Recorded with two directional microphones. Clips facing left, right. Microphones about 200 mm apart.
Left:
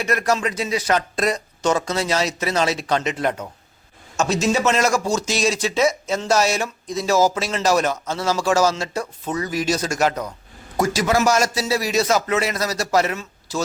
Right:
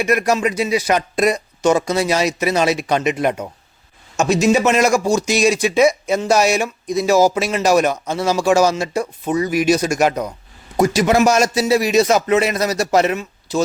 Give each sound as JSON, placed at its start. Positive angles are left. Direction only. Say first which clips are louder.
{"t": 0.0, "sound": "speech", "louder": "right 4 dB", "side_deg": -15}